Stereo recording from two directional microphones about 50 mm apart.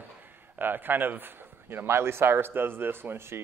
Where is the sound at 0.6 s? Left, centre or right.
Right.